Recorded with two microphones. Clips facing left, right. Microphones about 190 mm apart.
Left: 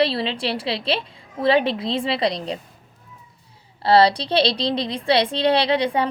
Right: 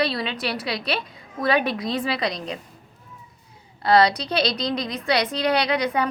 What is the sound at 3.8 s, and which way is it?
A woman's voice, 30° left (ahead or behind).